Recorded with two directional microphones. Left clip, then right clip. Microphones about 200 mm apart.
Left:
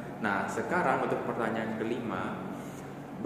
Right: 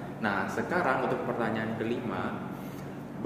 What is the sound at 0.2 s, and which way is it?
Speech, 10° right (ahead or behind).